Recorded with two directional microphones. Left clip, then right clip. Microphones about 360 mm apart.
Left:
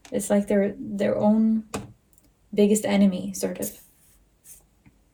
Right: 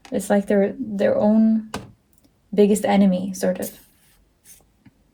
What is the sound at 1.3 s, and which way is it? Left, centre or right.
Speech, right.